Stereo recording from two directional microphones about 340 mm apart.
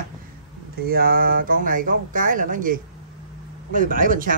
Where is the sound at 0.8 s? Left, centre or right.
Right.